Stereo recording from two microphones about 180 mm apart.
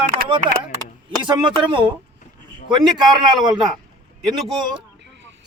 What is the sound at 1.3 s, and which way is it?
Speech, 30° right (ahead or behind).